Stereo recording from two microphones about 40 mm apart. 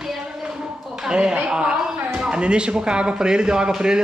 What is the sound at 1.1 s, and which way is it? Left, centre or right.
Speech, right.